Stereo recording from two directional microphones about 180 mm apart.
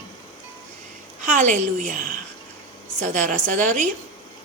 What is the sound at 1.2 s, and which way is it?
Speech, 45° right (ahead or behind).